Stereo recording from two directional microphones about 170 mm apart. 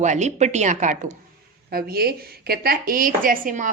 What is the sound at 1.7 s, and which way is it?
Speech, 65° right (ahead or behind).